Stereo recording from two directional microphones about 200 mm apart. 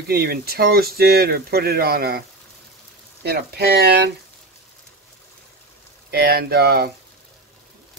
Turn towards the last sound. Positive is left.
turn(degrees=-50)  # may be behind; listen again after turning